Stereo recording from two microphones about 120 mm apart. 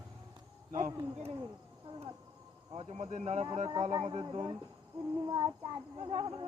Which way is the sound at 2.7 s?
65° right (ahead or behind).